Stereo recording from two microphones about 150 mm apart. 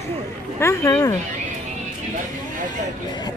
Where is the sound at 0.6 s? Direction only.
20° left (ahead or behind).